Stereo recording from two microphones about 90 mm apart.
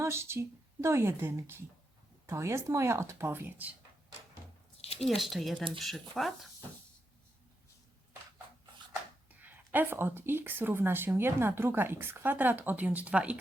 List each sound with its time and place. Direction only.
0.0 s speech: 30° right (ahead or behind)
5.0 s speech: centre (ahead or behind)
9.3 s speech: 20° right (ahead or behind)